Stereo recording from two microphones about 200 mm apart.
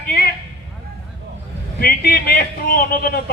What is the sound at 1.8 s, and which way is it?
A man's voice, 50° left (ahead or behind).